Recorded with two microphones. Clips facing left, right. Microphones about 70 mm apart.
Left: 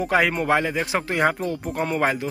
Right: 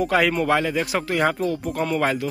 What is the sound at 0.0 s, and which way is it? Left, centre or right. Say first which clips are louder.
Speech: right 1 dB; left.